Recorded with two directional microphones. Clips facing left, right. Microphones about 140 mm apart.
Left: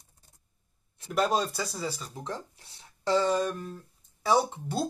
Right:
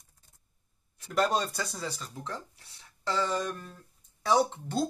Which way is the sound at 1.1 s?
5° left (ahead or behind).